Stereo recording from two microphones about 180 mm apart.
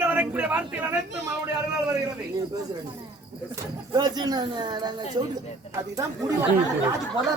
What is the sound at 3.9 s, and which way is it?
A man's voice, 20° right (ahead or behind).